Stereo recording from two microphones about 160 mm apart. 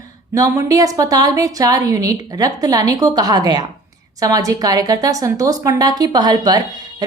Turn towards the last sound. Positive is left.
turn(degrees=-25)  # may be behind; listen again after turning